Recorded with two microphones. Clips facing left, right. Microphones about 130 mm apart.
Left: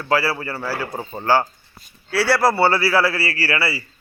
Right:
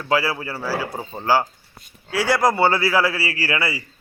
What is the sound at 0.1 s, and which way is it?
A man's voice, 15° right (ahead or behind).